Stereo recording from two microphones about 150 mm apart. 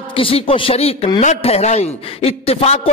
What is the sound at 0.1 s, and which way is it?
A man's voice, 40° left (ahead or behind).